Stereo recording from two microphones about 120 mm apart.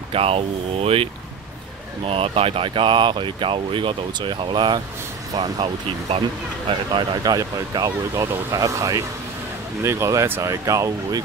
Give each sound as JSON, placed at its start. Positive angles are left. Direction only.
{"t": 0.1, "sound": "speech", "side_deg": -55}
{"t": 6.7, "sound": "speech", "side_deg": -40}